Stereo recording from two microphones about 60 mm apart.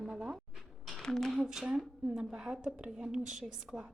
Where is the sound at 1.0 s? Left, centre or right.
Centre.